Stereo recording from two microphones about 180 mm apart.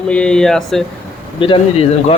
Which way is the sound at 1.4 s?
30° left (ahead or behind).